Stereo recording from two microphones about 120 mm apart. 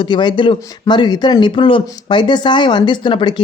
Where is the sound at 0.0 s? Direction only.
40° left (ahead or behind).